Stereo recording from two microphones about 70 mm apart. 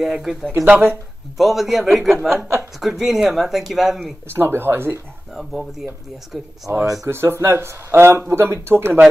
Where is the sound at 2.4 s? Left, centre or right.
Right.